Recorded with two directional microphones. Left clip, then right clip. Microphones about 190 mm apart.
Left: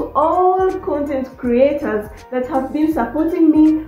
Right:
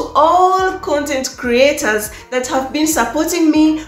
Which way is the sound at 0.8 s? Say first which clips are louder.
Right 3 dB; 15° right (ahead or behind).